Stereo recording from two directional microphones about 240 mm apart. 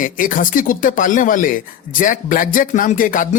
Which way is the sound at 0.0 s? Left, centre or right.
Left.